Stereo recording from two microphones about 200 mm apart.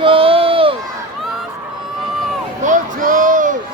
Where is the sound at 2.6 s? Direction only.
40° right (ahead or behind).